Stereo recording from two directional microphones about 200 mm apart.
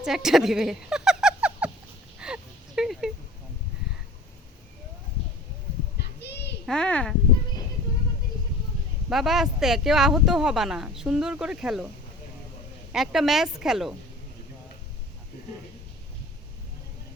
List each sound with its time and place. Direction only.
0.0 s a sound: centre (ahead or behind)
6.0 s children playing: 55° left (ahead or behind)
6.7 s speech: 5° left (ahead or behind)
9.0 s speech: centre (ahead or behind)
12.9 s speech: centre (ahead or behind)